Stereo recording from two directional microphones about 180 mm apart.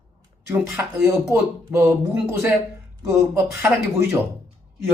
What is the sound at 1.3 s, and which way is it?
Speech, 15° right (ahead or behind).